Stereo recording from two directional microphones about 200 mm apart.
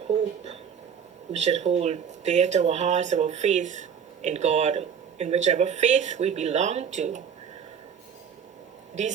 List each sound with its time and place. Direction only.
1.3 s speech: 35° right (ahead or behind)